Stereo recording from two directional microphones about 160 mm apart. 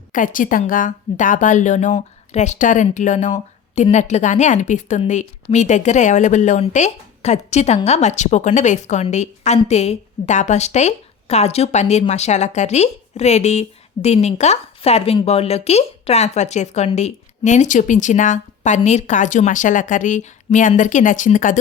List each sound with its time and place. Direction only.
0.1 s a woman's voice: 55° left (ahead or behind)